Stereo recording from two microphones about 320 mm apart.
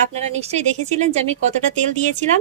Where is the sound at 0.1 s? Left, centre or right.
Centre.